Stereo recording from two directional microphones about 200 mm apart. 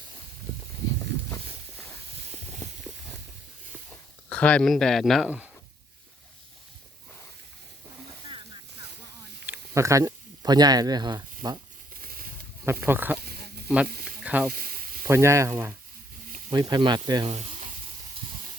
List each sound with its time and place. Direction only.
4.3 s speech: 5° left (ahead or behind)
9.5 s speech: 15° right (ahead or behind)
11.9 s a sound: 45° right (ahead or behind)
12.6 s speech: 10° right (ahead or behind)
13.1 s a sound: 50° right (ahead or behind)
13.8 s speech: 50° right (ahead or behind)
14.3 s speech: 5° right (ahead or behind)
14.5 s sizzle: 45° right (ahead or behind)
15.0 s speech: 15° right (ahead or behind)